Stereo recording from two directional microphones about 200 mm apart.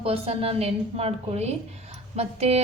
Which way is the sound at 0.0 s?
30° right (ahead or behind).